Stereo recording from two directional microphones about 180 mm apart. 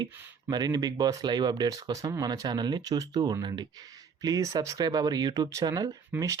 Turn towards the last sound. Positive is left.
turn(degrees=-20)  # may be behind; listen again after turning